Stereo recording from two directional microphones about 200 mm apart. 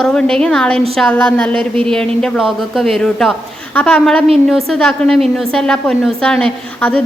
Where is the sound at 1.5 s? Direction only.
25° right (ahead or behind).